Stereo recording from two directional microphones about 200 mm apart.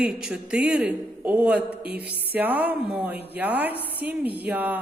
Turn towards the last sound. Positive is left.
turn(degrees=-10)  # may be behind; listen again after turning